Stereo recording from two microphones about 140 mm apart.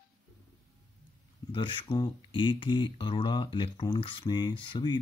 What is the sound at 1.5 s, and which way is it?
Speech, 35° left (ahead or behind).